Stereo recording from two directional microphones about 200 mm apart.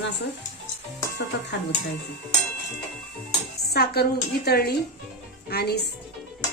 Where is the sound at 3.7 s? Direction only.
50° left (ahead or behind).